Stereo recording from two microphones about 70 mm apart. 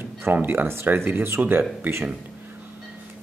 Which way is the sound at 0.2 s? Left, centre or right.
Right.